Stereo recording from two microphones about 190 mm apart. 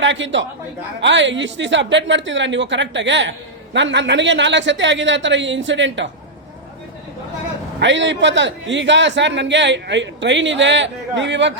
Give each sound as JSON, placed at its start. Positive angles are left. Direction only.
{"t": 0.0, "sound": "a man's voice", "side_deg": -75}
{"t": 7.8, "sound": "speech", "side_deg": -70}